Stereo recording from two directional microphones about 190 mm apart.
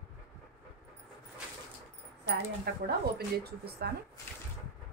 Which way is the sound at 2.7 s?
60° right (ahead or behind).